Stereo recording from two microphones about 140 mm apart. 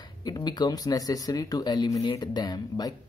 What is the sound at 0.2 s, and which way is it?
Speech, 30° left (ahead or behind).